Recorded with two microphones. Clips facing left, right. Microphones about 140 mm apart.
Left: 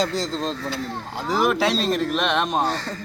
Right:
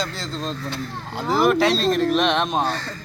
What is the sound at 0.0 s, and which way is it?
Speech, 40° left (ahead or behind).